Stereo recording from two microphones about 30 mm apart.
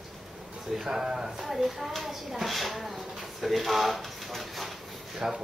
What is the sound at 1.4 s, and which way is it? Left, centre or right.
A woman's voice, centre.